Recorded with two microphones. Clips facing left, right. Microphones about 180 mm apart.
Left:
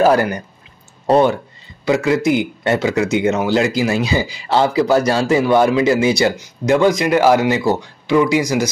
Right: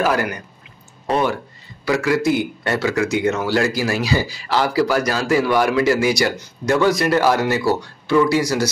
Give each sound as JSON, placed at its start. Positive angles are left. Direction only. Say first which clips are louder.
{"t": 0.0, "sound": "speech", "louder": "left 6 dB", "side_deg": 30}
{"t": 1.9, "sound": "a man's voice", "louder": "left 3 dB", "side_deg": 20}